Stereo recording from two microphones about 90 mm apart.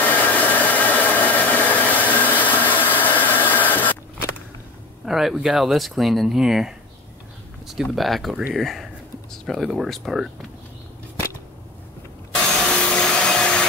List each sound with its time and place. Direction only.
0.0 s hair dryer: 15° left (ahead or behind)
5.0 s speech: 5° right (ahead or behind)
12.6 s vacuum cleaner: 10° left (ahead or behind)